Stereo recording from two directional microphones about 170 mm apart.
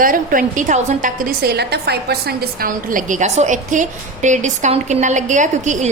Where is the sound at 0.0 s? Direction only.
55° right (ahead or behind).